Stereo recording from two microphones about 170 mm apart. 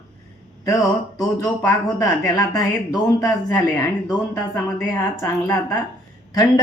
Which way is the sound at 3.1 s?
15° left (ahead or behind).